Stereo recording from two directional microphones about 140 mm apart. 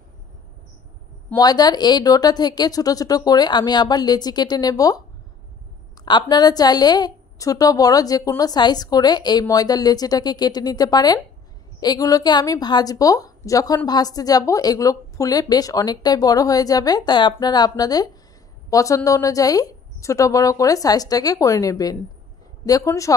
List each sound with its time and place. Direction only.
1.3 s a woman's voice: 30° left (ahead or behind)
6.0 s a woman's voice: 30° left (ahead or behind)